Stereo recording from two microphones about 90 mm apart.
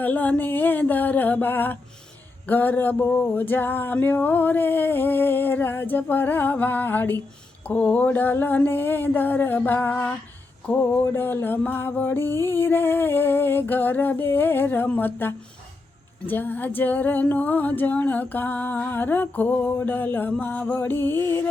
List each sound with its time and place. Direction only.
0.0 s music: 20° left (ahead or behind)